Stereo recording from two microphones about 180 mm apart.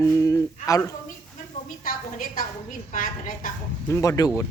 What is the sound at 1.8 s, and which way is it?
A woman's voice, 50° left (ahead or behind).